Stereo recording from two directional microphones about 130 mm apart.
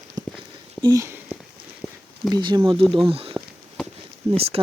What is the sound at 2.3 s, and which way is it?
Speech, 35° right (ahead or behind).